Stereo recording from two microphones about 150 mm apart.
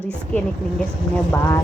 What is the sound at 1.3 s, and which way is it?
Speech, 15° left (ahead or behind).